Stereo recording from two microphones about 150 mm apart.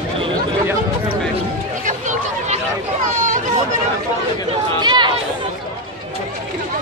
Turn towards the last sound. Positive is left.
turn(degrees=-30)  # may be behind; listen again after turning